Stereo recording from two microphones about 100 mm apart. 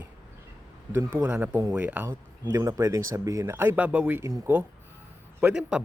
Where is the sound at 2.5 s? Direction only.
35° right (ahead or behind); by 4.2 s 15° right (ahead or behind).